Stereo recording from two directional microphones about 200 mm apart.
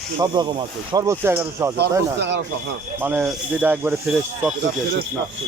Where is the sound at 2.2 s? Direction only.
60° right (ahead or behind).